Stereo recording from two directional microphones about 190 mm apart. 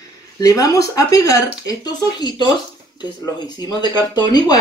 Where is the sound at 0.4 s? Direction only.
20° left (ahead or behind).